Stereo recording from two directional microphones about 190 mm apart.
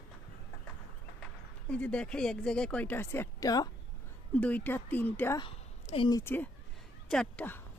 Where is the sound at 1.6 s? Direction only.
5° left (ahead or behind).